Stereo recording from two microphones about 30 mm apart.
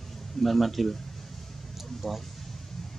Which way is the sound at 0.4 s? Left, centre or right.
Centre.